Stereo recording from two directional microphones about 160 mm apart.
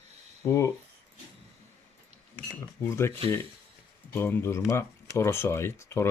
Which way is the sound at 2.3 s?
15° left (ahead or behind).